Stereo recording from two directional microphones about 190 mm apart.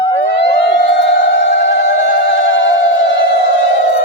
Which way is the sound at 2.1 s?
70° left (ahead or behind).